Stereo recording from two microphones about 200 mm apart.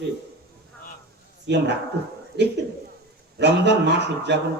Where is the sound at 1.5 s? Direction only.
60° right (ahead or behind).